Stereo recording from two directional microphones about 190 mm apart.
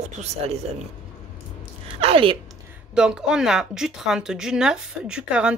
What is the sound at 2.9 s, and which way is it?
Speech, 5° right (ahead or behind).